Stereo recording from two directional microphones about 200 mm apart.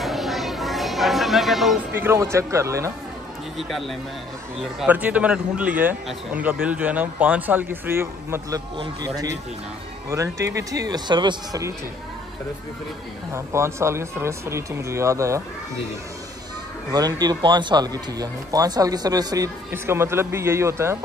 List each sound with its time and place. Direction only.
0.0 s a sound: centre (ahead or behind)
2.0 s a man's voice: 10° right (ahead or behind)
3.5 s a man's voice: centre (ahead or behind); by 11.7 s 20° right (ahead or behind)
13.3 s a man's voice: 15° right (ahead or behind)
16.9 s a man's voice: 20° right (ahead or behind)